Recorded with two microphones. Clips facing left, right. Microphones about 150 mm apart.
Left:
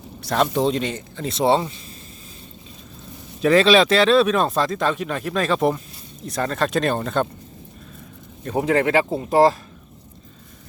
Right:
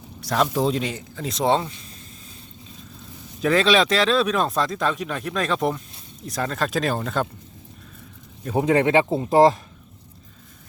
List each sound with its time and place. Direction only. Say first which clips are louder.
0.2 s speech: left 2 dB; centre (ahead or behind)
3.4 s speech: left 4 dB; centre (ahead or behind)
8.5 s speech: right 1 dB; 20° right (ahead or behind)